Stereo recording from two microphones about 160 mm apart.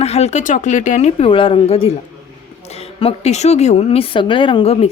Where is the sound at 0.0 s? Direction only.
40° left (ahead or behind).